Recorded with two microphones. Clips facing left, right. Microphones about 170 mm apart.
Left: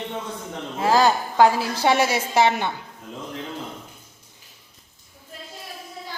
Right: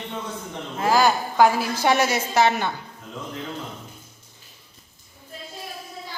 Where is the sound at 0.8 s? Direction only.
30° left (ahead or behind).